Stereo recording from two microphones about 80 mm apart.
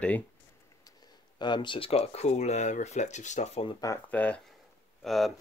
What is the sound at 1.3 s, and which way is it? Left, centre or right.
Speech, left.